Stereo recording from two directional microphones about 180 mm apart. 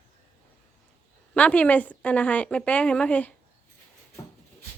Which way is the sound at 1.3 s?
5° left (ahead or behind).